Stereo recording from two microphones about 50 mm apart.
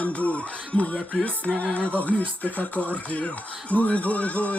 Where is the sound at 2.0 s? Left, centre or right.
Left.